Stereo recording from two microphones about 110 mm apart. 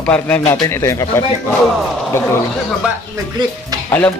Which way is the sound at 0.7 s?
25° left (ahead or behind).